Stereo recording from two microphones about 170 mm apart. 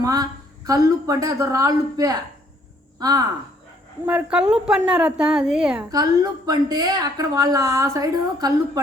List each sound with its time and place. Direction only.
0.0 s a woman's voice: 20° right (ahead or behind)
4.0 s a woman's voice: 5° right (ahead or behind)
5.9 s a woman's voice: 20° right (ahead or behind)